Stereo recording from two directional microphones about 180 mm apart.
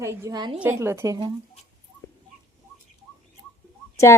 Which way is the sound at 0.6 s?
15° right (ahead or behind).